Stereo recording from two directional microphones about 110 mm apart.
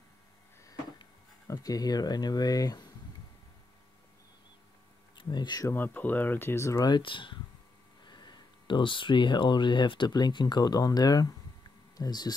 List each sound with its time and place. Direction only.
1.5 s speech: 35° left (ahead or behind)
5.1 s speech: 40° left (ahead or behind)
5.7 s speech: 15° left (ahead or behind); by 12.4 s 40° left (ahead or behind)